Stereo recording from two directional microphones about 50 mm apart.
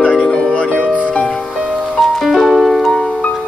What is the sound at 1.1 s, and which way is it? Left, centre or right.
Music, left.